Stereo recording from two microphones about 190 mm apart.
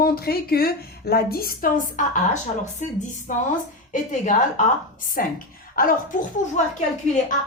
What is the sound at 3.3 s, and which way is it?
A woman's voice, 45° left (ahead or behind).